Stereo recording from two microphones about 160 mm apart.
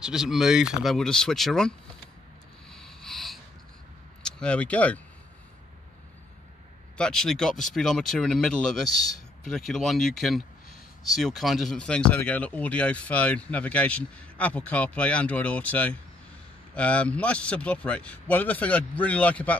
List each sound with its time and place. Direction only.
0.0 s speech: 5° right (ahead or behind)
2.7 s a sound: 5° left (ahead or behind)
4.2 s speech: 5° left (ahead or behind)
7.0 s speech: 5° left (ahead or behind)